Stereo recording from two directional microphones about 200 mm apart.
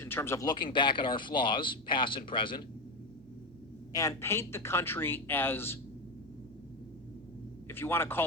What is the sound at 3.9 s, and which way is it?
Speech, 15° left (ahead or behind).